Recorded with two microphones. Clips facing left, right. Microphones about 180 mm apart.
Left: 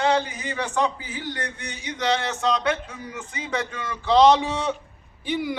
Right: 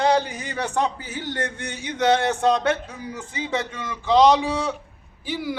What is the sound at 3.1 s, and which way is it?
A man's voice, 25° right (ahead or behind).